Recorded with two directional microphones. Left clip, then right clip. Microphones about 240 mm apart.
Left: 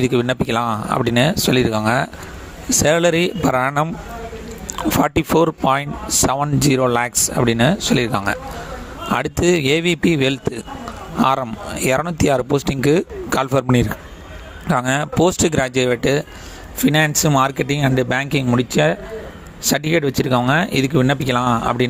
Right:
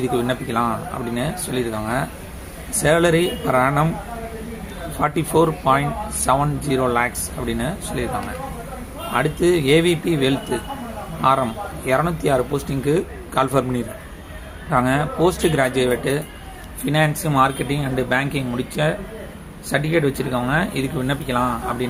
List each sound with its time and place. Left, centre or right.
0.0 s speech: left
5.0 s speech: left
9.1 s speech: left